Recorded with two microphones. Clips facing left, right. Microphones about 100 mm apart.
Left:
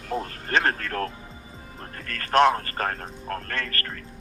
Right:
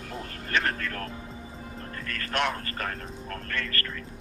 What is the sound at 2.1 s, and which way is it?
Speech, 40° left (ahead or behind).